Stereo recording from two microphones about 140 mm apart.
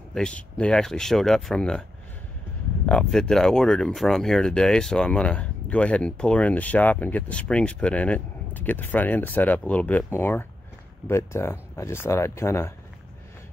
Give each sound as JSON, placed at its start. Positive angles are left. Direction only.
{"t": 0.1, "sound": "speech", "side_deg": 5}
{"t": 2.9, "sound": "speech", "side_deg": 5}